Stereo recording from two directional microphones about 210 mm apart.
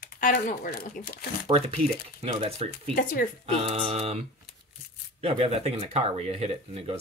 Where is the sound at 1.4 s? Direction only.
30° right (ahead or behind).